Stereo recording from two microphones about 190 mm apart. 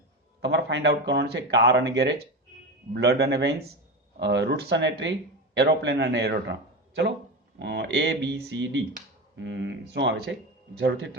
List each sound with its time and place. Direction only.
0.4 s speech: 65° right (ahead or behind)
2.9 s a man's voice: 60° right (ahead or behind)